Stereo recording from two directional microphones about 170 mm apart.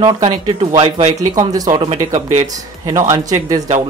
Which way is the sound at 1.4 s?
25° right (ahead or behind).